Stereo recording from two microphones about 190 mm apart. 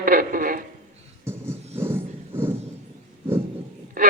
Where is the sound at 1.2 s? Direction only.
10° right (ahead or behind).